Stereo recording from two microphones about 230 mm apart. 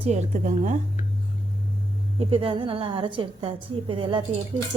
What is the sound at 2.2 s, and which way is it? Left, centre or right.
A woman's voice, right.